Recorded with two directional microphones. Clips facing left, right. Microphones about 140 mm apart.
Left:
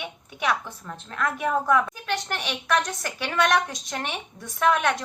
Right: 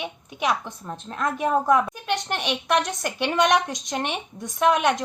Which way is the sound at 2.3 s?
20° right (ahead or behind).